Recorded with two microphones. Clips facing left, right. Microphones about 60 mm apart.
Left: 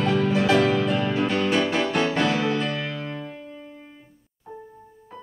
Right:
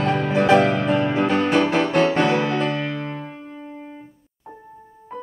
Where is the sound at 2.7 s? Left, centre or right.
Centre.